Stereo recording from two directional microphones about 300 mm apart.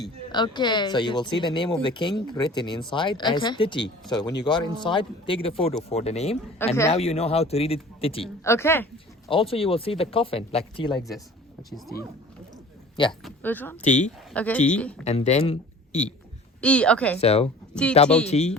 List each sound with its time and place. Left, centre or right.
0.3 s speech: centre
6.6 s speech: centre
6.9 s speech: left
13.2 s a woman's voice: centre
13.8 s speech: left
14.3 s a woman's voice: centre
15.0 s speech: left
16.6 s a woman's voice: centre
17.2 s speech: centre
17.7 s a woman's voice: centre
18.3 s speech: left